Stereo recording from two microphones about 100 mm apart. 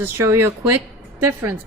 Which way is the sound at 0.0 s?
25° right (ahead or behind).